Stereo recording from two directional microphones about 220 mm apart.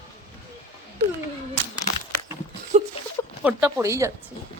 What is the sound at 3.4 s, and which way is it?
Speech, 10° right (ahead or behind).